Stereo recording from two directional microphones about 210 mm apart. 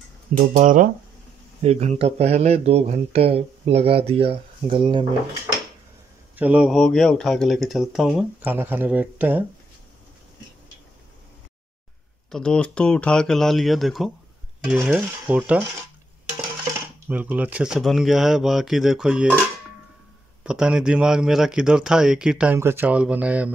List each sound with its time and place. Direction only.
0.6 s speech: 40° right (ahead or behind)
6.3 s a man's voice: 5° right (ahead or behind)
12.3 s a man's voice: 5° left (ahead or behind)
14.6 s dishes: 5° right (ahead or behind)
17.1 s a man's voice: 5° right (ahead or behind)
20.4 s a man's voice: 5° right (ahead or behind)